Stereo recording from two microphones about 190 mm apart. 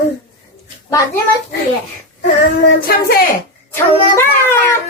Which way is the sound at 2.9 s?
50° left (ahead or behind).